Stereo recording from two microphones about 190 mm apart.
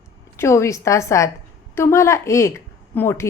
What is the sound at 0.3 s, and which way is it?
A woman's voice, 15° left (ahead or behind).